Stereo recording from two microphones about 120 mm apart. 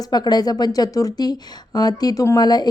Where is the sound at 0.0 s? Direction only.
35° left (ahead or behind).